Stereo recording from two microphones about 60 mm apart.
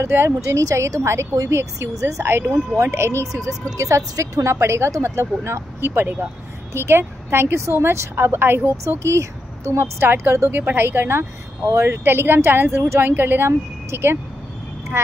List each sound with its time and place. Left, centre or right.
0.0 s a woman's voice: right
0.4 s a woman's voice: right
2.2 s a woman's voice: right
3.3 s a woman's voice: right
9.0 s a woman's voice: right
10.5 s speech: right
12.0 s speech: right
13.5 s speech: right